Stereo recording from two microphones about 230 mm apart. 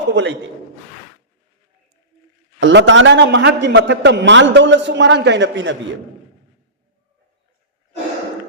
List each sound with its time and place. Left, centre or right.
0.1 s a man's voice: right
2.6 s a man's voice: right